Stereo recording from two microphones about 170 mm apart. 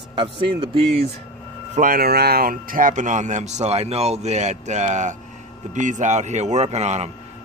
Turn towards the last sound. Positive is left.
turn(degrees=-40)  # may be behind; listen again after turning